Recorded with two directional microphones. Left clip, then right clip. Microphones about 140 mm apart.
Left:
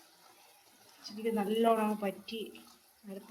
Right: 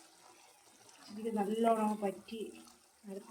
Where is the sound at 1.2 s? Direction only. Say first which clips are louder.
Left 3 dB; 5° right (ahead or behind).